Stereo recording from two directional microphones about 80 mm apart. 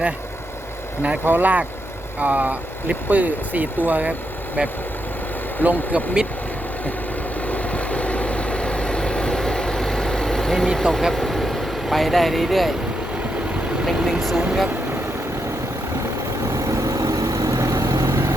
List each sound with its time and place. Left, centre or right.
1.0 s speech: centre
5.9 s speech: centre
7.4 s vehicle: centre
10.8 s speech: centre
13.8 s speech: centre
16.5 s vehicle: right